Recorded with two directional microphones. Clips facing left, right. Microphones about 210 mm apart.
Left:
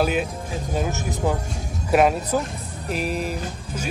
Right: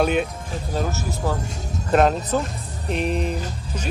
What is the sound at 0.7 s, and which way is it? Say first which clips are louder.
Speech: even; 15° left (ahead or behind).